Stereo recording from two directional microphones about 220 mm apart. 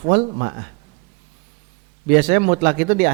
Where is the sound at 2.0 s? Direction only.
45° right (ahead or behind).